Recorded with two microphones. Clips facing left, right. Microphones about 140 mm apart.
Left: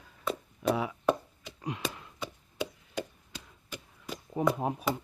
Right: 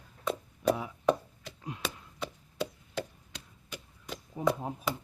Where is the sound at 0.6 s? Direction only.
90° left.